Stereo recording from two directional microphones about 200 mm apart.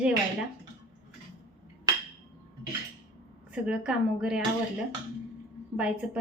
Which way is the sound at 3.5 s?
5° right (ahead or behind).